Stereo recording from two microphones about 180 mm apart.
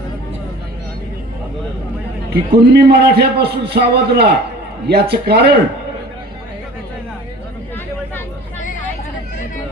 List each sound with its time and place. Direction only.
2.3 s a man's voice: 70° right (ahead or behind)